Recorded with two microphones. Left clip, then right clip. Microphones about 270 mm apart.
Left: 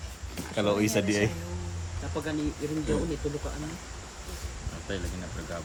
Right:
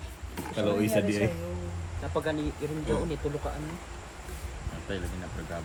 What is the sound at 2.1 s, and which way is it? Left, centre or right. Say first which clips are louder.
Speech: right 3 dB; centre.